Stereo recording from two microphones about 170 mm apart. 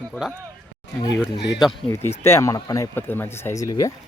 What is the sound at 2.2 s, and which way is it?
Speech, 15° left (ahead or behind).